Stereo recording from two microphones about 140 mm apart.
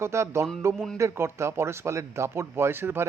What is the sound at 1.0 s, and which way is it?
Speech, 20° right (ahead or behind).